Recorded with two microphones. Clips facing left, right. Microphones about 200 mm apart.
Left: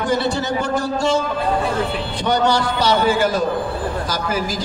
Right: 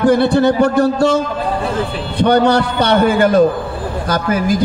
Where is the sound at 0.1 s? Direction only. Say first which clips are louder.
Right 8 dB; 55° right (ahead or behind).